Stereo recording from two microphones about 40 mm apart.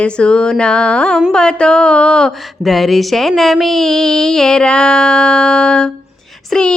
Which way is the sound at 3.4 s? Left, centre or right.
Centre.